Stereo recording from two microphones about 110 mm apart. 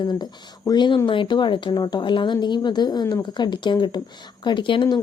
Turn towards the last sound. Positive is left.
turn(degrees=45)  # may be behind; listen again after turning